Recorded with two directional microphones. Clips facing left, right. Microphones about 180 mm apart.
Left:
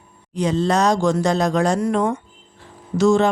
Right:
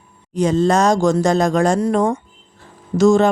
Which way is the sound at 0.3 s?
45° right (ahead or behind).